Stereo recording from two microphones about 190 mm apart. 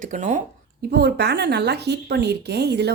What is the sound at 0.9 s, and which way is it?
A woman's voice, 60° right (ahead or behind).